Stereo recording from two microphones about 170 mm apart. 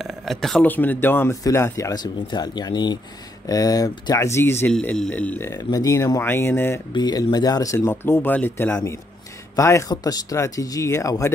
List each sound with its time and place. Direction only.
0.0 s speech: centre (ahead or behind)
4.7 s speech: 5° left (ahead or behind)
5.5 s speech: 20° left (ahead or behind)
6.9 s speech: 25° left (ahead or behind)